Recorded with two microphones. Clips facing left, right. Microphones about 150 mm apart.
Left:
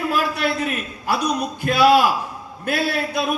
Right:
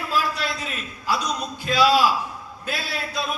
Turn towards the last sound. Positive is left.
turn(degrees=60)  # may be behind; listen again after turning